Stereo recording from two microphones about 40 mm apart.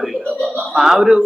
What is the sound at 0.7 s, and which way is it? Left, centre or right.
Speech, centre.